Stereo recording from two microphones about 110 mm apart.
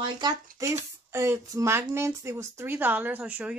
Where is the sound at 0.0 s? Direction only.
40° right (ahead or behind).